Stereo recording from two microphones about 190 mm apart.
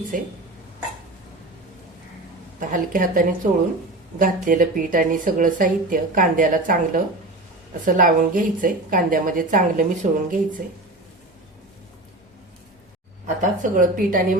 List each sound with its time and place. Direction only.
2.6 s speech: 45° right (ahead or behind)
13.2 s speech: 40° right (ahead or behind)